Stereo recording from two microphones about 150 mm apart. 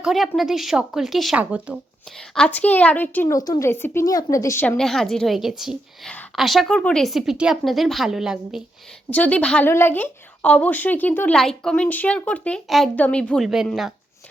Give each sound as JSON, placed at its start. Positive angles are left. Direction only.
{"t": 0.0, "sound": "a woman's voice", "side_deg": 0}
{"t": 2.1, "sound": "a woman's voice", "side_deg": 5}
{"t": 3.3, "sound": "a woman's voice", "side_deg": 25}
{"t": 4.8, "sound": "a woman's voice", "side_deg": 0}
{"t": 9.0, "sound": "a woman's voice", "side_deg": 10}